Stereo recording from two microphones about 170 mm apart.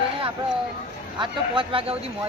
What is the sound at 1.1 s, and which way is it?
Speech, 30° right (ahead or behind).